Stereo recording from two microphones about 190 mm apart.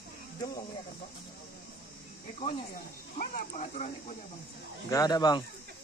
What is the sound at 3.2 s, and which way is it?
Snake, 45° left (ahead or behind).